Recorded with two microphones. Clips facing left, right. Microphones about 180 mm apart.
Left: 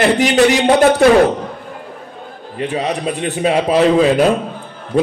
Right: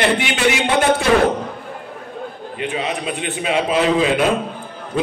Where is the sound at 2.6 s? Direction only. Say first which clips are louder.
Left 4 dB; 40° left (ahead or behind).